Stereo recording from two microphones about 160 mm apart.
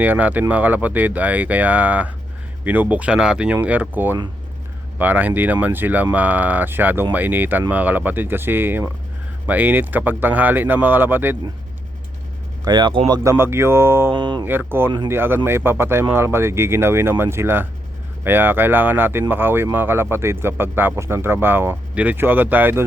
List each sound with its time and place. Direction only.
0.0 s speech: 10° right (ahead or behind)
12.6 s speech: 25° right (ahead or behind)
13.2 s speech: 15° right (ahead or behind)
14.1 s speech: 30° right (ahead or behind)
14.4 s speech: 10° right (ahead or behind)